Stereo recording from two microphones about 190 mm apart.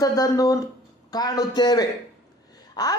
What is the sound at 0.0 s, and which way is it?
A woman's voice, 20° left (ahead or behind).